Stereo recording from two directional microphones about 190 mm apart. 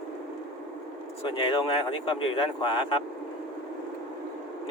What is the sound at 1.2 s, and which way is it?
Speech, 25° left (ahead or behind).